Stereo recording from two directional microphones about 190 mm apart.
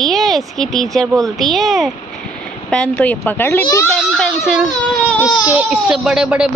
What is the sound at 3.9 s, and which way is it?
A child's voice, 5° left (ahead or behind).